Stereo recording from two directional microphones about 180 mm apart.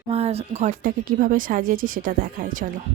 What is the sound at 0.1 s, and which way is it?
Speech, 35° right (ahead or behind).